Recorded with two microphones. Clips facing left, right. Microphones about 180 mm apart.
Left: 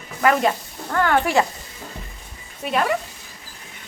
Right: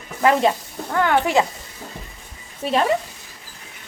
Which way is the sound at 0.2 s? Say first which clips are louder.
Right 1 dB; 25° right (ahead or behind).